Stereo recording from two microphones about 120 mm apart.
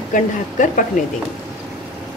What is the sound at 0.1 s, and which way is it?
Speech, 90° left.